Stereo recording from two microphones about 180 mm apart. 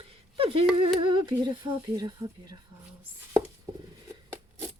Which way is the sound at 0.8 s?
25° right (ahead or behind).